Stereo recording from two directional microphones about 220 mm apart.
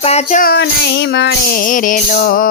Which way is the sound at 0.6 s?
50° left (ahead or behind).